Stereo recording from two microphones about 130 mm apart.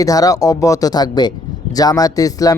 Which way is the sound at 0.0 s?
25° left (ahead or behind).